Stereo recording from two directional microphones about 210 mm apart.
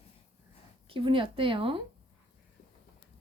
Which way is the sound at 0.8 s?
25° right (ahead or behind).